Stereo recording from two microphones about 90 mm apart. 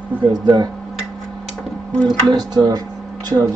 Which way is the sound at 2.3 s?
50° right (ahead or behind).